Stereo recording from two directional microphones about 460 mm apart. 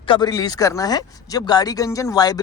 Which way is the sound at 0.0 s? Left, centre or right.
Centre.